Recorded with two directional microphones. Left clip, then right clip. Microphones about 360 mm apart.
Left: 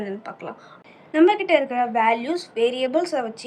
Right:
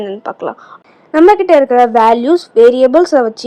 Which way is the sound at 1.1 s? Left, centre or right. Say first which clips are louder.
Right 10 dB; right.